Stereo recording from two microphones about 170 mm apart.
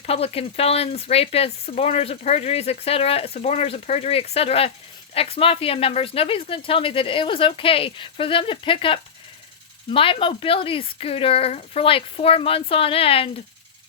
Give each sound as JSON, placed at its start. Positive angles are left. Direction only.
{"t": 0.0, "sound": "speech", "side_deg": 35}